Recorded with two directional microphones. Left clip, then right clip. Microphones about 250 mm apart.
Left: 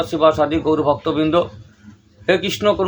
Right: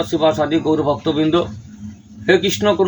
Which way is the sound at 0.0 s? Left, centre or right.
Centre.